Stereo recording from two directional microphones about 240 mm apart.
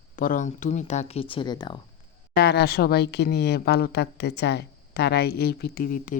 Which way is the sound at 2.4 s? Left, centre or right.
Left.